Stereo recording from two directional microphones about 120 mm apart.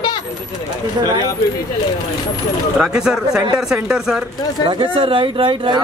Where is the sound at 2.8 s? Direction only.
5° right (ahead or behind).